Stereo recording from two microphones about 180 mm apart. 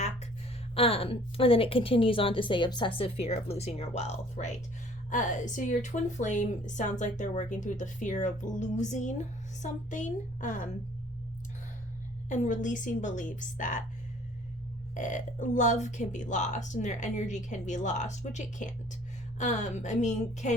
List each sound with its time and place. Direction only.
0.8 s a woman's voice: 30° left (ahead or behind)
12.3 s a woman's voice: 45° left (ahead or behind)
14.9 s a woman's voice: 45° left (ahead or behind)